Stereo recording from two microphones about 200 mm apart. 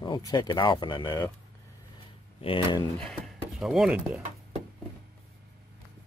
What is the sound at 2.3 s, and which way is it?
Speech, 25° left (ahead or behind).